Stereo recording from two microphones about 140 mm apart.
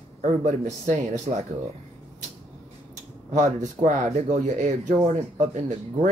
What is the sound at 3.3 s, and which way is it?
Speech, 60° right (ahead or behind).